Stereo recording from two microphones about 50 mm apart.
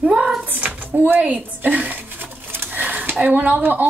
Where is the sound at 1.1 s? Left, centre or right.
Right.